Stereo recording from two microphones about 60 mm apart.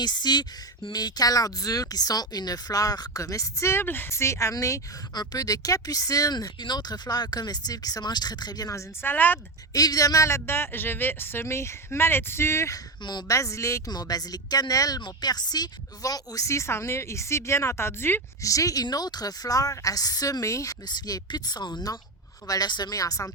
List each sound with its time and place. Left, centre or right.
0.9 s a woman's voice: left
3.8 s speech: left
4.1 s a woman's voice: left
5.2 s speech: left
7.1 s a woman's voice: left
9.0 s speech: left
9.7 s a woman's voice: left
13.2 s a woman's voice: left
16.0 s a woman's voice: left
18.4 s a woman's voice: left
22.4 s speech: left